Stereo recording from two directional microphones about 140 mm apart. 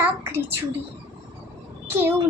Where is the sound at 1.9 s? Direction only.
15° right (ahead or behind).